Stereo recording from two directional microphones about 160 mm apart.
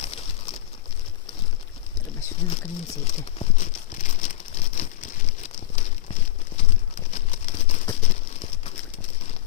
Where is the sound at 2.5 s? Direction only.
40° left (ahead or behind).